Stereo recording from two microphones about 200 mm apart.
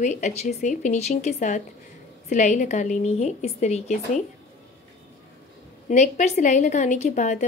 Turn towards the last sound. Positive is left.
turn(degrees=35)  # may be behind; listen again after turning